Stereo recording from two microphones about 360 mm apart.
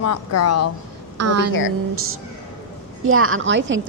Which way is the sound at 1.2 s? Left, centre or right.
Right.